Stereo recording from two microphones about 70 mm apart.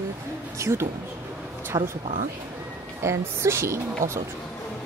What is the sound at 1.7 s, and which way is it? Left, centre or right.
Speech, right.